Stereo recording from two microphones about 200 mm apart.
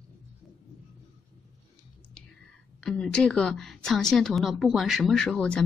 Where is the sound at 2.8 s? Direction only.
5° left (ahead or behind).